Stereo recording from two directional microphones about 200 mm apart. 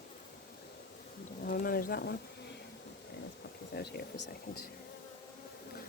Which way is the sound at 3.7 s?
55° left (ahead or behind).